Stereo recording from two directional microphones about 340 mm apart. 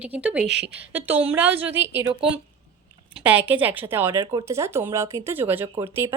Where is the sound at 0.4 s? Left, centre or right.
Right.